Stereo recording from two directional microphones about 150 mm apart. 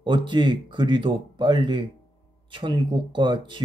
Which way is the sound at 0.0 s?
30° right (ahead or behind).